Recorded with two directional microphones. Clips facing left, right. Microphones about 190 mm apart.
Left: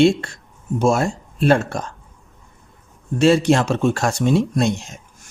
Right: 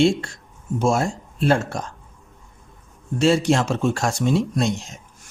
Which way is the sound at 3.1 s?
60° left (ahead or behind).